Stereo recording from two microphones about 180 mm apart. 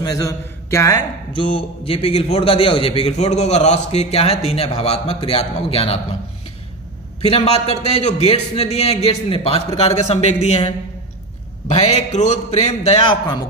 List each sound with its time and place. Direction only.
0.0 s a man's voice: 20° left (ahead or behind)
7.2 s a man's voice: 35° left (ahead or behind)